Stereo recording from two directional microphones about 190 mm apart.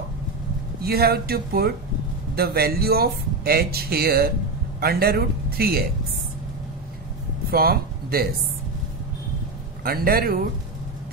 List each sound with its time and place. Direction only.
0.8 s speech: 55° right (ahead or behind)
7.5 s speech: 50° right (ahead or behind)
9.8 s speech: 50° right (ahead or behind)